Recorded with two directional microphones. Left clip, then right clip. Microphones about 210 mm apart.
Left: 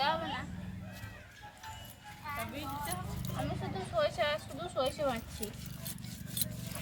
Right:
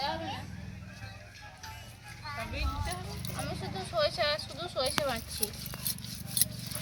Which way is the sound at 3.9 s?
Centre (ahead or behind).